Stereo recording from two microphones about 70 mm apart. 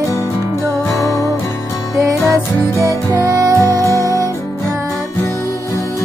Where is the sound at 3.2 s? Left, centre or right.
Right.